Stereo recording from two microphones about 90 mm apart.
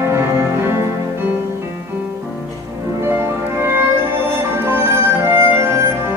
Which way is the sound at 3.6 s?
25° right (ahead or behind).